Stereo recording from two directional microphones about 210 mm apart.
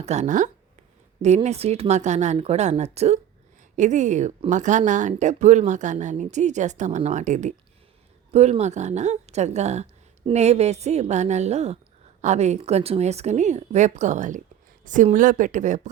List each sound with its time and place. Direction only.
0.0 s a woman's voice: 30° right (ahead or behind)